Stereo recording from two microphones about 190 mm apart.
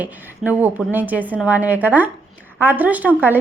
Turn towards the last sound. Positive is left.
turn(degrees=-10)  # may be behind; listen again after turning